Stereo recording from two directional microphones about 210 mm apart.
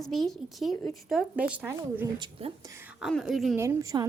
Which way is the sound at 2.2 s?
25° right (ahead or behind).